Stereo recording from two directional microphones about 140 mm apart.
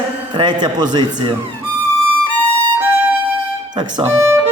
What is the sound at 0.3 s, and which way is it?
Speech, 30° right (ahead or behind).